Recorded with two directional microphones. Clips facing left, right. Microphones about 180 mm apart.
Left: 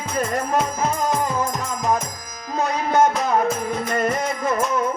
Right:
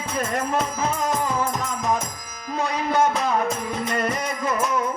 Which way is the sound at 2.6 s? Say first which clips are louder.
Left 3 dB; 45° left (ahead or behind).